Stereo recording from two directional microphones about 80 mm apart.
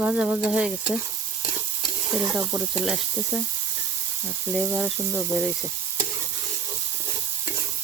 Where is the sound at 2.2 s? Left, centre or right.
Right.